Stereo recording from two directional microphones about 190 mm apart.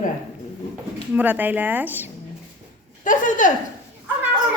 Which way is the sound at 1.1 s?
10° right (ahead or behind).